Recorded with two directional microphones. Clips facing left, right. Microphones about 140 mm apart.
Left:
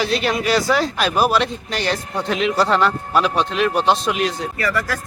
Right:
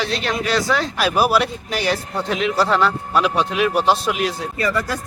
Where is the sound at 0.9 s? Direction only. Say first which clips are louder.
Even; 5° right (ahead or behind).